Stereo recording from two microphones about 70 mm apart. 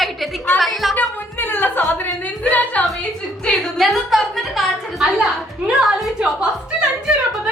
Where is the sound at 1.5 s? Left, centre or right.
Left.